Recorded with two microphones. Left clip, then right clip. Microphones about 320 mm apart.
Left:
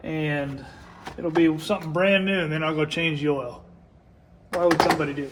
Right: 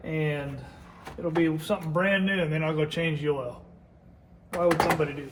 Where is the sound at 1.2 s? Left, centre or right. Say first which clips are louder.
Left 5 dB; left.